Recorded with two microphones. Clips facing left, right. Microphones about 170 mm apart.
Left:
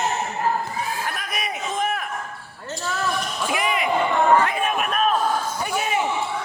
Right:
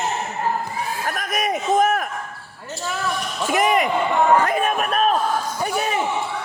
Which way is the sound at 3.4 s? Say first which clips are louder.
Right 7 dB; 45° right (ahead or behind).